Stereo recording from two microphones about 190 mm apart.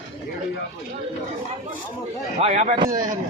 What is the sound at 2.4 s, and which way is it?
Speech, 40° right (ahead or behind).